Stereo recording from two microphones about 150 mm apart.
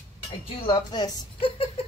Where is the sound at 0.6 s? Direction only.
30° left (ahead or behind).